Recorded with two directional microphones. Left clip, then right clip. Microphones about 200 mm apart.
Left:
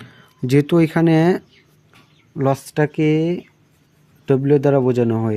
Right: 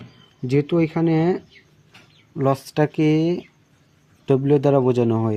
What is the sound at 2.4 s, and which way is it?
Speech, 15° left (ahead or behind).